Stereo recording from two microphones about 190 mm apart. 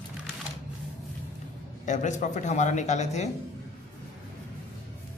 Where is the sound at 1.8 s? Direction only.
40° left (ahead or behind).